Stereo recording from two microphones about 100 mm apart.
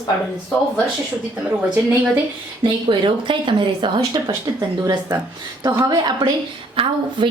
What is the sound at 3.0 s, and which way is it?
Speech, 55° right (ahead or behind).